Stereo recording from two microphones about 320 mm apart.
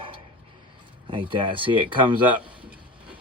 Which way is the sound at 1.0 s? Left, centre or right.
Centre.